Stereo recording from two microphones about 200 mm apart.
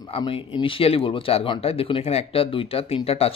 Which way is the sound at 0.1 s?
25° left (ahead or behind).